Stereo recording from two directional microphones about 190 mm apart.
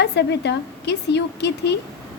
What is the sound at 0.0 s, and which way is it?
A woman's voice, 65° left (ahead or behind).